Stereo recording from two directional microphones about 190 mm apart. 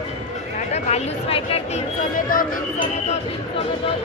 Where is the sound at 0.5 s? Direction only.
35° left (ahead or behind).